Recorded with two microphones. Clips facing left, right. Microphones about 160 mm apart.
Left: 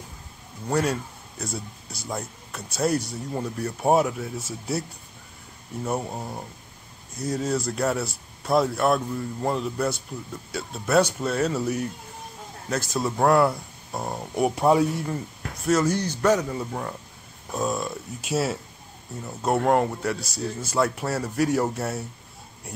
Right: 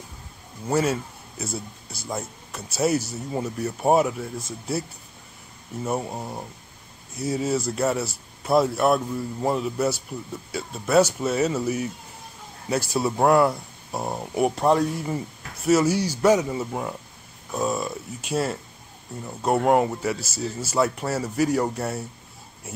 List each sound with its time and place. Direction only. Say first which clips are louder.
0.7 s a man's voice: right 2 dB; 5° right (ahead or behind)
12.9 s a man's voice: right 1 dB; 10° right (ahead or behind)
14.5 s speech: left 3 dB; 10° left (ahead or behind)
15.0 s a man's voice: right 1 dB; 5° right (ahead or behind)